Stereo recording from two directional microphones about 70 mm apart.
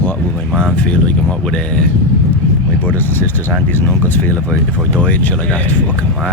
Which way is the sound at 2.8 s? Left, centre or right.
Left.